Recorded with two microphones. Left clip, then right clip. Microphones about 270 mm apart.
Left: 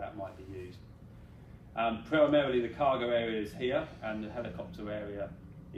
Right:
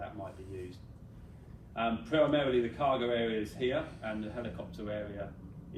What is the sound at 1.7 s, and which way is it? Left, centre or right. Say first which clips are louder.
A man's voice: left 1 dB; left.